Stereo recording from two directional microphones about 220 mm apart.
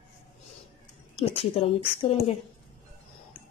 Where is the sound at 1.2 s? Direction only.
30° left (ahead or behind).